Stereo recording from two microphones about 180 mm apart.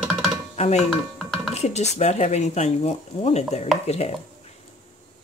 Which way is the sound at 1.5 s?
40° left (ahead or behind).